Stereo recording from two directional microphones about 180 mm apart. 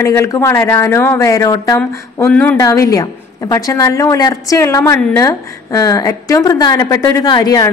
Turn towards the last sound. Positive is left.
turn(degrees=20)  # may be behind; listen again after turning